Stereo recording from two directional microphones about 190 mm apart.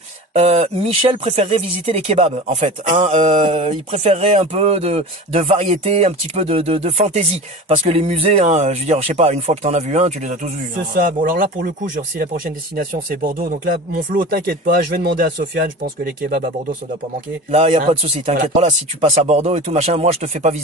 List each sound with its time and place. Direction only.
0.3 s speech: 35° right (ahead or behind); by 16.4 s 50° right (ahead or behind)
17.5 s speech: 35° right (ahead or behind)